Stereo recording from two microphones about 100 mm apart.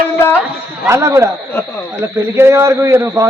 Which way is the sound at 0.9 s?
30° right (ahead or behind).